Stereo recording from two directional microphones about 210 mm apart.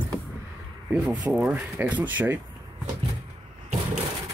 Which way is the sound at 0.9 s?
5° right (ahead or behind).